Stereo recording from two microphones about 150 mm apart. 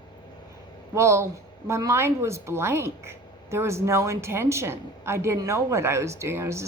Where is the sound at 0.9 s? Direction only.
20° right (ahead or behind).